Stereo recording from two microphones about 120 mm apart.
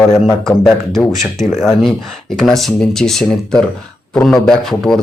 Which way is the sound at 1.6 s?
5° left (ahead or behind).